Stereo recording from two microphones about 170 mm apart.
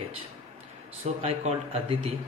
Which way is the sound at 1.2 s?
35° right (ahead or behind).